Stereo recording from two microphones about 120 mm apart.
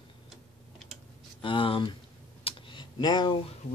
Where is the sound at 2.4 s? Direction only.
45° left (ahead or behind).